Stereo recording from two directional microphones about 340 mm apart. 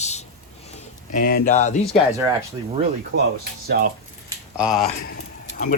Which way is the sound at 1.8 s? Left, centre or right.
Centre.